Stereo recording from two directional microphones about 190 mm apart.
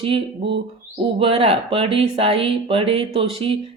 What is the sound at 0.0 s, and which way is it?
Speech, 30° right (ahead or behind).